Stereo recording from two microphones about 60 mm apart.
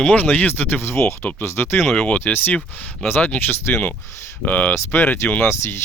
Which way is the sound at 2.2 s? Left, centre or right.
Left.